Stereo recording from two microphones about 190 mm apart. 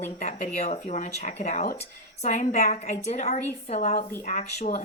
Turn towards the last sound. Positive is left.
turn(degrees=40)  # may be behind; listen again after turning